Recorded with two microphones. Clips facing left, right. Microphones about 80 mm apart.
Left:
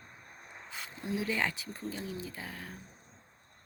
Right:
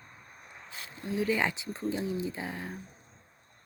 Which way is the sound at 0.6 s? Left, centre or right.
Centre.